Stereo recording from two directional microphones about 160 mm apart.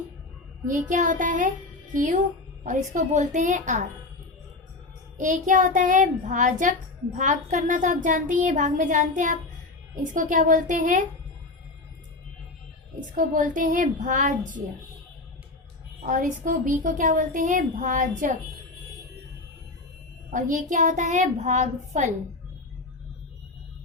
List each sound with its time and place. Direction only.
0.7 s speech: 50° right (ahead or behind)
5.1 s speech: 50° right (ahead or behind)
13.1 s speech: 55° right (ahead or behind)
16.0 s speech: 55° right (ahead or behind)
20.3 s speech: 55° right (ahead or behind)